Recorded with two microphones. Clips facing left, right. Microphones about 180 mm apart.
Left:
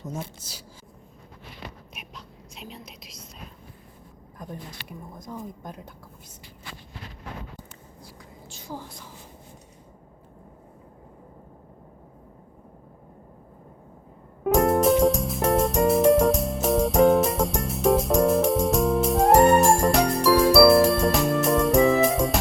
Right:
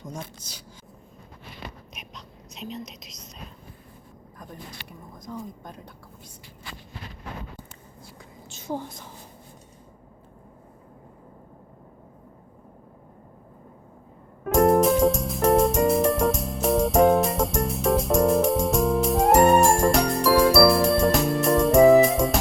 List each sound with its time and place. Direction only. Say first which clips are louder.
0.0 s speech: left 2 dB; 5° left (ahead or behind)
1.9 s whispering: even; 5° left (ahead or behind)
5.3 s speech: right 1 dB; 10° left (ahead or behind)
8.0 s a sound: even; 20° right (ahead or behind)
14.5 s music: right 1 dB; centre (ahead or behind)